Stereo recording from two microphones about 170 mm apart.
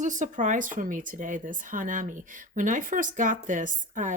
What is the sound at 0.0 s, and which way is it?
Speech, 45° right (ahead or behind).